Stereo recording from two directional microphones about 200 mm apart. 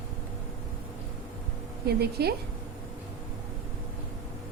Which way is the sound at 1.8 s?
55° right (ahead or behind).